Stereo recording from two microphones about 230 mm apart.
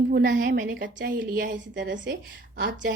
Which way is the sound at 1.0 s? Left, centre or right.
Right.